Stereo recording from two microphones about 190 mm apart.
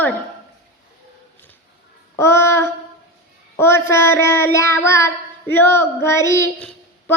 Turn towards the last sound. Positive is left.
turn(degrees=10)  # may be behind; listen again after turning